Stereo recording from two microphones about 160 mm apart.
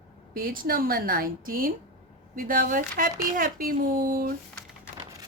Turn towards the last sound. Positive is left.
turn(degrees=-70)  # may be behind; listen again after turning